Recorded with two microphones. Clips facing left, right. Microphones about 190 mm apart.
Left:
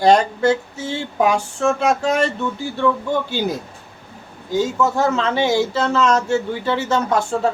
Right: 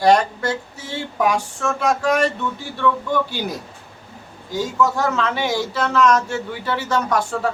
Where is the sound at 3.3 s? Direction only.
25° left (ahead or behind).